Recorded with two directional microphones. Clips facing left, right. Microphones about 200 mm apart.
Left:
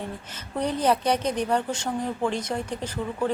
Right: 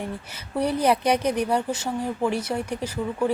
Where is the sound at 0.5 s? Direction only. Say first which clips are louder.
Right 2 dB; 10° right (ahead or behind).